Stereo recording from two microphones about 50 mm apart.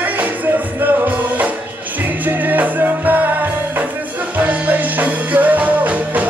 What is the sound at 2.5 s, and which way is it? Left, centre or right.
Music, right.